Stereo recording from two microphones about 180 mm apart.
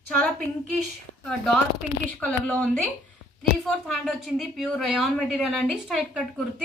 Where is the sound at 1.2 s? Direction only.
5° left (ahead or behind).